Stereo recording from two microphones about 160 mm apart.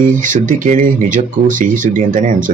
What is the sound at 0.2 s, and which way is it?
Speech, 55° right (ahead or behind).